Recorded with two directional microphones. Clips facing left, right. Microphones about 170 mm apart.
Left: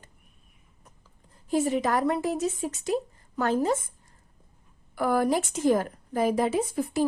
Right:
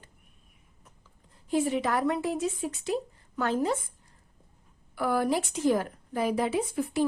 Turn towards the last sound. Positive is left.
turn(degrees=40)  # may be behind; listen again after turning